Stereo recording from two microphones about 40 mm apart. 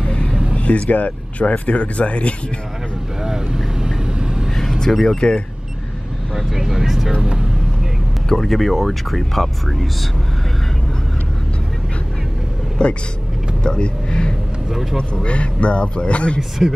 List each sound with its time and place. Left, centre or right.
0.6 s speech: left
3.2 s vehicle: centre
4.5 s vehicle: centre
5.0 s speech: centre
6.3 s speech: centre
7.2 s vehicle: centre
8.4 s speech: centre
12.8 s speech: left
14.7 s speech: centre
15.2 s speech: left
16.6 s speech: centre